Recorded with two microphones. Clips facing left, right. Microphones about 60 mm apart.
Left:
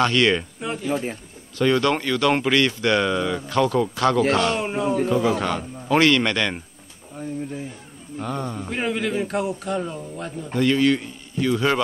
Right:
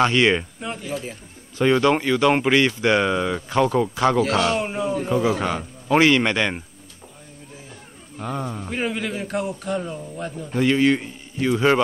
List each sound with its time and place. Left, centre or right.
0.0 s speech: centre
0.8 s speech: left
1.6 s speech: centre
4.6 s a man's voice: centre
5.0 s speech: centre
8.2 s a man's voice: centre
10.5 s a man's voice: centre